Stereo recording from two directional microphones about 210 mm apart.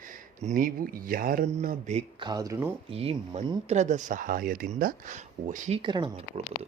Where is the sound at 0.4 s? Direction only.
40° right (ahead or behind).